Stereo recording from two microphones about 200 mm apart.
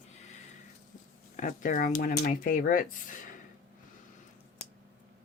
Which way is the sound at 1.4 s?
40° left (ahead or behind).